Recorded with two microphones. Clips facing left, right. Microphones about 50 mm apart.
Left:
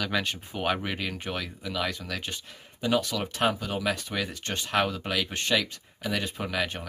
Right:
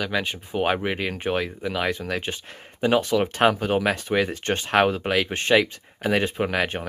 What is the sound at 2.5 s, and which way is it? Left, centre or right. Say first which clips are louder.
Speech: right 6 dB; right.